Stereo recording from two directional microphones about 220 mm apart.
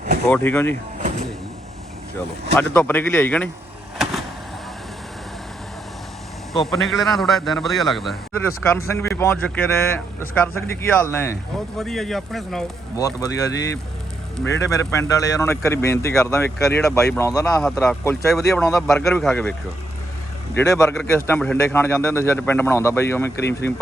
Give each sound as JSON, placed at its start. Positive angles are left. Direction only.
{"t": 0.3, "sound": "speech", "side_deg": 10}
{"t": 2.6, "sound": "speech", "side_deg": 10}
{"t": 3.9, "sound": "vehicle", "side_deg": 0}
{"t": 6.5, "sound": "a man's voice", "side_deg": 0}
{"t": 8.4, "sound": "a man's voice", "side_deg": 10}
{"t": 13.0, "sound": "speech", "side_deg": 15}
{"t": 14.6, "sound": "speech", "side_deg": 15}
{"t": 17.4, "sound": "a man's voice", "side_deg": 5}
{"t": 18.3, "sound": "a man's voice", "side_deg": 0}
{"t": 20.6, "sound": "speech", "side_deg": 15}